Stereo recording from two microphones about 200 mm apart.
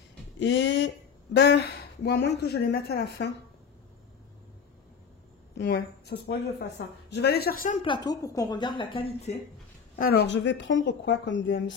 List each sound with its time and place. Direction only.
0.4 s a woman's voice: 65° left (ahead or behind)
5.6 s a woman's voice: 55° left (ahead or behind)
7.8 s a woman's voice: 20° left (ahead or behind)
9.9 s a woman's voice: 50° left (ahead or behind)